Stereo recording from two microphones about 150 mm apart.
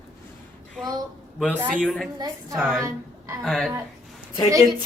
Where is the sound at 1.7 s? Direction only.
5° left (ahead or behind).